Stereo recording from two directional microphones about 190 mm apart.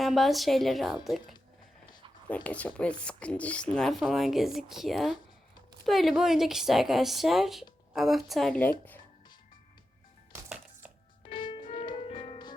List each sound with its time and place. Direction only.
0.0 s speech: centre (ahead or behind)
11.2 s music: 25° left (ahead or behind)